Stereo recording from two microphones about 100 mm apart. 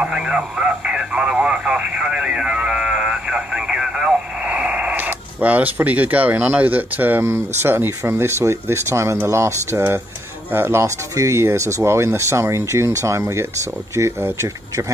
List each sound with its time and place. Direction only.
0.0 s speech: 10° right (ahead or behind); by 14.9 s 25° right (ahead or behind)